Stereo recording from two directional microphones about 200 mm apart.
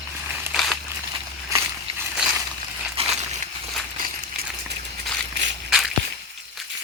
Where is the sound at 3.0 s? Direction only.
30° right (ahead or behind).